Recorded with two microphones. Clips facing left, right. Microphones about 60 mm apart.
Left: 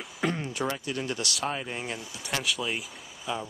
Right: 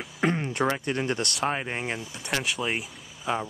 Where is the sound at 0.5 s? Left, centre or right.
Right.